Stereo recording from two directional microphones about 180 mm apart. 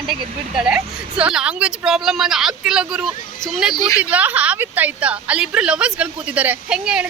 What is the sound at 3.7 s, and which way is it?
Speech, 20° left (ahead or behind).